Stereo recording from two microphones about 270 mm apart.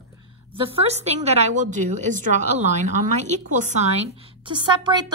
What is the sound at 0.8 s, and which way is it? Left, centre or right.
A woman's voice, right.